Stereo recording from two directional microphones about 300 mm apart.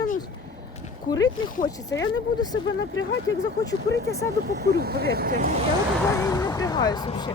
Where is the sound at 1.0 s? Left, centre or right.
Centre.